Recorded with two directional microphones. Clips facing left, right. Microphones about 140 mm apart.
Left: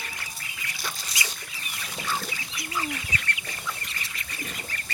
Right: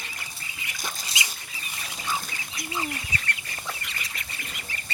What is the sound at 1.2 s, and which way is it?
Rodents, 25° right (ahead or behind).